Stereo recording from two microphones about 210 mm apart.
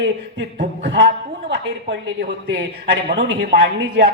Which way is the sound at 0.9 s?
55° right (ahead or behind).